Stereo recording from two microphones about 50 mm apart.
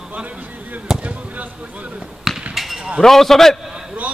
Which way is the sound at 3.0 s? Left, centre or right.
Centre.